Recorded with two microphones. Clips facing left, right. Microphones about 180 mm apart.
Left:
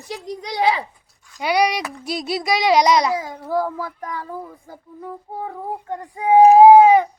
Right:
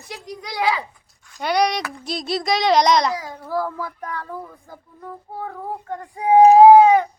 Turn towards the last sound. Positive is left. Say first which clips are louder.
# left 1 dB
turn(degrees=10)  # may be behind; listen again after turning